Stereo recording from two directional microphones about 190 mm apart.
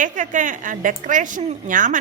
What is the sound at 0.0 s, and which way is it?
A woman's voice, 40° right (ahead or behind).